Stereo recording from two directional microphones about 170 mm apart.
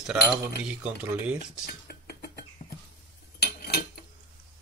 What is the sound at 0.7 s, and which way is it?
Speech, 10° right (ahead or behind).